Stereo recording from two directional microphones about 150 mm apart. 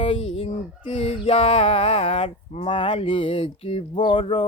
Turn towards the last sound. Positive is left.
turn(degrees=35)  # may be behind; listen again after turning